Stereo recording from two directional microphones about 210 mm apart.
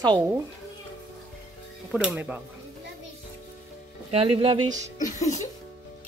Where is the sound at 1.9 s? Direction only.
5° right (ahead or behind).